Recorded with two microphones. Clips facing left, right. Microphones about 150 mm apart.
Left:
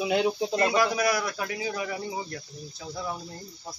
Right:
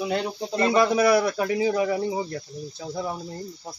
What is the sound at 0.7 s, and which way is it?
Speech, 25° right (ahead or behind).